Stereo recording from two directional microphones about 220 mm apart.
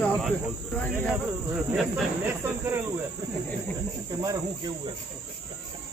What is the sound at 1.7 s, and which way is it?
Speech, 5° right (ahead or behind).